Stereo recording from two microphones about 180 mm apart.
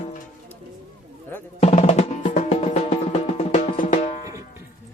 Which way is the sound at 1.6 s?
35° left (ahead or behind).